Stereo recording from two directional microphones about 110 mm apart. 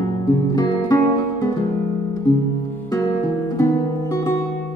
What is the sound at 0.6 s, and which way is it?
Music, 35° left (ahead or behind).